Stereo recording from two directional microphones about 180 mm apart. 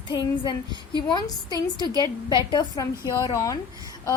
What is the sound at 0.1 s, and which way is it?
Speech, 25° left (ahead or behind).